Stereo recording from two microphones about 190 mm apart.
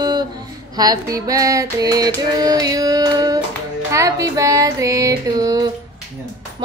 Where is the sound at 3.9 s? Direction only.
15° right (ahead or behind).